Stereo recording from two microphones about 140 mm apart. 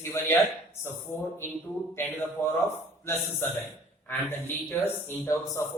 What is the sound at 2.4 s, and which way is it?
Speech, 15° left (ahead or behind).